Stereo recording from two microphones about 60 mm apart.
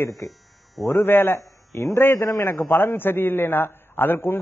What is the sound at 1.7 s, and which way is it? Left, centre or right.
Speech, left.